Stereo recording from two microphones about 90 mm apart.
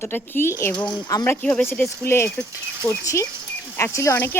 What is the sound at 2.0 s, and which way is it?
A woman's voice, 30° left (ahead or behind).